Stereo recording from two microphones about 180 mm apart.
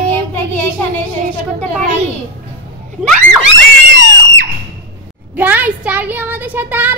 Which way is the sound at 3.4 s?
85° right.